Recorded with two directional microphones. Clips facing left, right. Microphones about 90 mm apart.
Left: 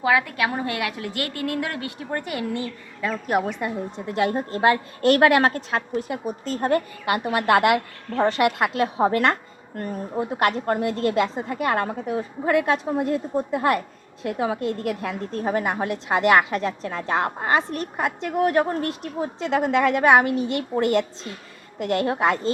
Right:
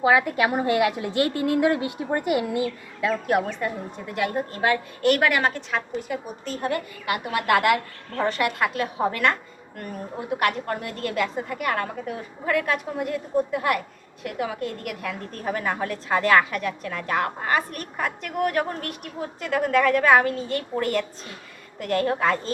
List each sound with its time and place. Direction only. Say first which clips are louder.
0.0 s a woman's voice: right 2 dB; 25° right (ahead or behind); by 3.4 s centre (ahead or behind)
3.4 s a woman's voice: left 2 dB; 20° left (ahead or behind); by 6.8 s 40° left (ahead or behind)
7.0 s a woman's voice: left 3 dB; 25° left (ahead or behind)